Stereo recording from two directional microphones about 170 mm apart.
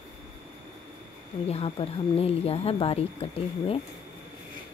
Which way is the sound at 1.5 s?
35° left (ahead or behind).